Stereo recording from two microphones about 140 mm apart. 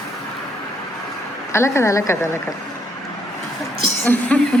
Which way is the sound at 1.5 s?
20° left (ahead or behind).